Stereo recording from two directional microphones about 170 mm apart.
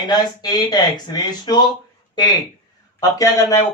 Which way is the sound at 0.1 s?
25° left (ahead or behind).